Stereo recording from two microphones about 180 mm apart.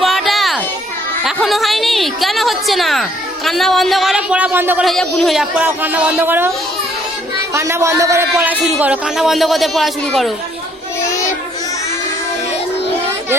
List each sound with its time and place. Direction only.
0.0 s children playing: centre (ahead or behind)
1.2 s speech: centre (ahead or behind)
4.9 s speech: centre (ahead or behind)
7.5 s speech: 15° right (ahead or behind)
8.8 s speech: 5° right (ahead or behind)